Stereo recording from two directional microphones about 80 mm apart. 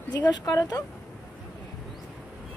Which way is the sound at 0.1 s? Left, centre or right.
Left.